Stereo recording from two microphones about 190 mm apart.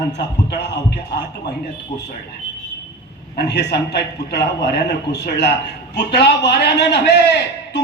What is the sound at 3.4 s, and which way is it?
A man's voice, 65° left (ahead or behind).